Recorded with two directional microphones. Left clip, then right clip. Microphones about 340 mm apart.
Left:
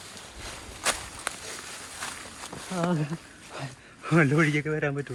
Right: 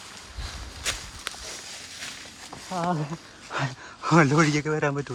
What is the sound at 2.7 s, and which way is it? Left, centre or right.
Speech, centre.